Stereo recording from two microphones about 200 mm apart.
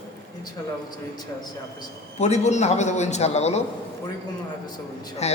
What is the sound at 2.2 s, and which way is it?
A man's voice, 35° left (ahead or behind).